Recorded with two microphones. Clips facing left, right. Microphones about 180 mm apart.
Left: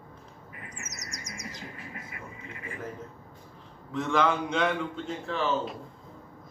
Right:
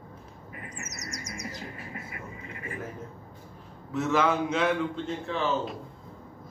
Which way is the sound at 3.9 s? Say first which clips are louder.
Right 1 dB; 5° right (ahead or behind).